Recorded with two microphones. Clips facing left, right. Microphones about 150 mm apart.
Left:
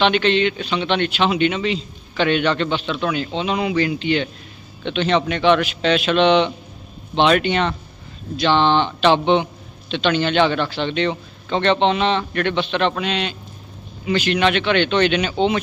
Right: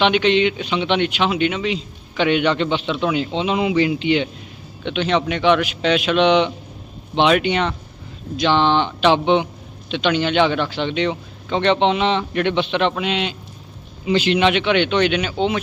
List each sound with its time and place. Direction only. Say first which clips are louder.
0.0 s speech: right 1 dB; 15° right (ahead or behind)